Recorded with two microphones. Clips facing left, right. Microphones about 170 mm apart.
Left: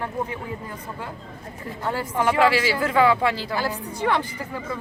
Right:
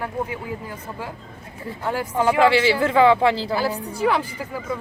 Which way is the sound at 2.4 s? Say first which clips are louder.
Right 4 dB; 25° right (ahead or behind).